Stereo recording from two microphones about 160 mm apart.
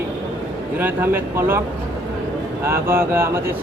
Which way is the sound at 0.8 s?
10° right (ahead or behind).